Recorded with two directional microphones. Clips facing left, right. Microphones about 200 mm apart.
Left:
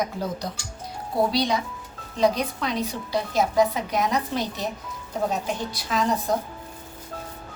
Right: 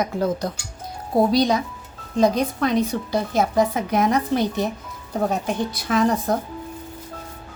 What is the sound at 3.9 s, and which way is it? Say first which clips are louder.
Speech: right 5 dB; 50° right (ahead or behind).